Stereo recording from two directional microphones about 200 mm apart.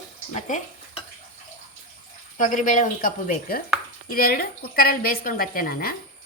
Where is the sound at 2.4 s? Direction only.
40° left (ahead or behind).